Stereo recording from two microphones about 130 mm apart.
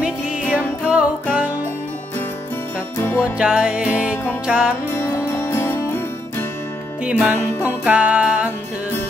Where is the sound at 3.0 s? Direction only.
20° left (ahead or behind).